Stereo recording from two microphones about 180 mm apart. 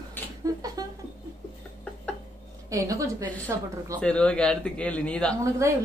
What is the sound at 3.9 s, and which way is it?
A man's voice, 5° left (ahead or behind).